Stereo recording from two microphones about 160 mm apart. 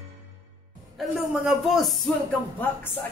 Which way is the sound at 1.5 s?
Centre (ahead or behind).